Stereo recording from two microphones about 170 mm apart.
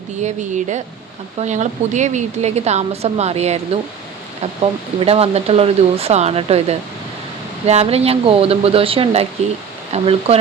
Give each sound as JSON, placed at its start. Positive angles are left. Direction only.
{"t": 0.2, "sound": "speech", "side_deg": -45}
{"t": 4.6, "sound": "speech", "side_deg": -35}